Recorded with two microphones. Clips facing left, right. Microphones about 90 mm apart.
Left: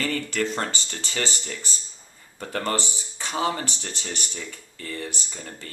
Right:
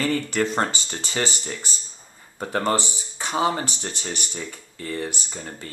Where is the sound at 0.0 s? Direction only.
20° right (ahead or behind).